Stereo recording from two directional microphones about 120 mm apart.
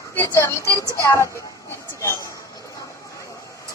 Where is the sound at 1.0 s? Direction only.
25° left (ahead or behind).